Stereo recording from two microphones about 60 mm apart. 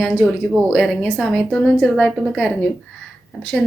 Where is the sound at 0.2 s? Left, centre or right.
Left.